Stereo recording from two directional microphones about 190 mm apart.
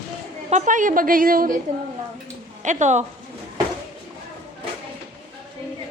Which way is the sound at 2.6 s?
40° right (ahead or behind).